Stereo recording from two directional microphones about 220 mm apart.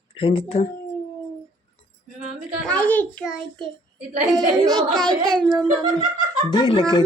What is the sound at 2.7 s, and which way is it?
Speech, 10° left (ahead or behind).